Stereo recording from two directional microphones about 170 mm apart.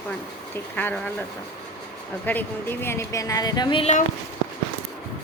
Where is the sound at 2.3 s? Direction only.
10° left (ahead or behind); by 3.9 s 25° left (ahead or behind).